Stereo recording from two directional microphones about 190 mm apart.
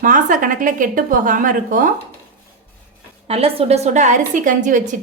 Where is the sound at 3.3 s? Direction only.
30° right (ahead or behind).